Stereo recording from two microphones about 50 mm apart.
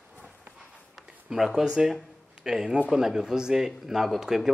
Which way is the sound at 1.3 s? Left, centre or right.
Centre.